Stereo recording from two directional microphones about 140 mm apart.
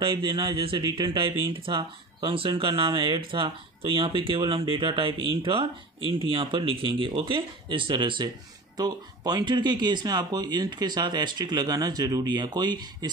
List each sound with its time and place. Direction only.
0.0 s speech: 35° right (ahead or behind)